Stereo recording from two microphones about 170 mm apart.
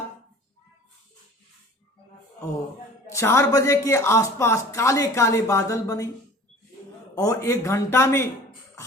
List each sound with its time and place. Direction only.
3.1 s speech: 15° left (ahead or behind)
7.2 s speech: 20° left (ahead or behind)